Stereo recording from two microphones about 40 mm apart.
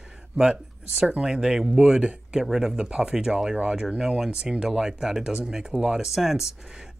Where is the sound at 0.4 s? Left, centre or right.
Centre.